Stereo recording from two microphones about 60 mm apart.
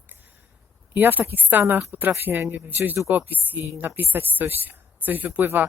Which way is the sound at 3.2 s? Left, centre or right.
Right.